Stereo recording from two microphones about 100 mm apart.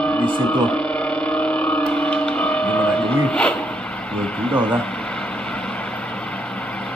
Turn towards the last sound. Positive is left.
turn(degrees=10)  # may be behind; listen again after turning